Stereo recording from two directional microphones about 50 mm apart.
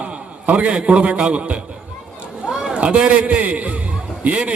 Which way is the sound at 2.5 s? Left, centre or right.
Centre.